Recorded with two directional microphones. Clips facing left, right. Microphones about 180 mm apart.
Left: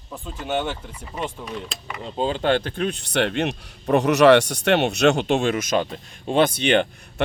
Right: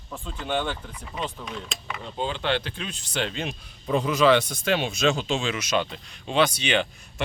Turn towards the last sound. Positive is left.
turn(degrees=55)  # may be behind; listen again after turning